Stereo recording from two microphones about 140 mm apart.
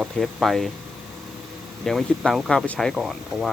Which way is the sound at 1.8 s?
5° left (ahead or behind).